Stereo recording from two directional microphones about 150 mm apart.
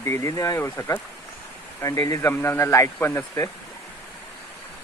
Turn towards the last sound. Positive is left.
turn(degrees=20)  # may be behind; listen again after turning